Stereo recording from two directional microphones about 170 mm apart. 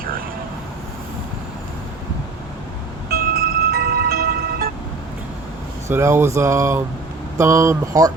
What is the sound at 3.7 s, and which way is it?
Vehicle, 65° right (ahead or behind).